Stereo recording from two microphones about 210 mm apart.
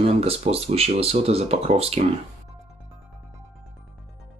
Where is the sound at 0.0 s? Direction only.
30° right (ahead or behind).